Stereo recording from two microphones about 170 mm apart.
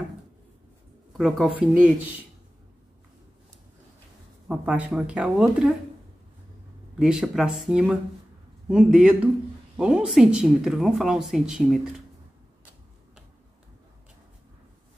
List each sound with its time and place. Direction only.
1.1 s speech: 5° right (ahead or behind)
4.5 s speech: 5° right (ahead or behind)
7.0 s speech: 5° right (ahead or behind)